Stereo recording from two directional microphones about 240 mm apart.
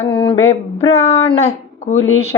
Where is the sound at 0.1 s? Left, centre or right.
Left.